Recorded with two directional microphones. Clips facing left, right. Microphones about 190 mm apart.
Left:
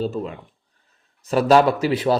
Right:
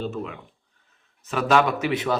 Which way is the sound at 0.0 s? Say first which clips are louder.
Left 5 dB; 35° left (ahead or behind).